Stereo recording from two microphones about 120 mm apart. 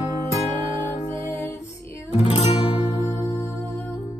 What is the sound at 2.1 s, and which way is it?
Music, 60° left (ahead or behind).